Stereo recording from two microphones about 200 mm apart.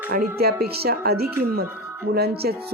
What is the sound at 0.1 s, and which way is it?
Speech, 50° right (ahead or behind).